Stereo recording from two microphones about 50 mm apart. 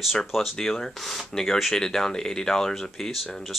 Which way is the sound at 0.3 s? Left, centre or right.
Centre.